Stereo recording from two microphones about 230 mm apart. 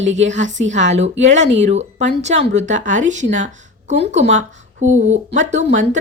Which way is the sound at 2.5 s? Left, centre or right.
Right.